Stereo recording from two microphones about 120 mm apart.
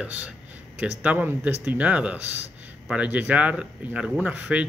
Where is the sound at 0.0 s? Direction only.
10° right (ahead or behind).